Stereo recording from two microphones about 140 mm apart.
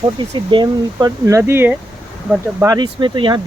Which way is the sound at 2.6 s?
30° right (ahead or behind).